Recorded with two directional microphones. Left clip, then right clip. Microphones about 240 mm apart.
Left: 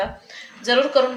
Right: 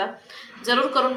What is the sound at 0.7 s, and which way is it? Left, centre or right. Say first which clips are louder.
Speech: left 3 dB; left.